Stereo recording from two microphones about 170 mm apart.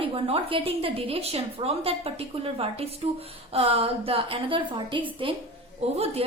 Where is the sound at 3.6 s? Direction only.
35° right (ahead or behind).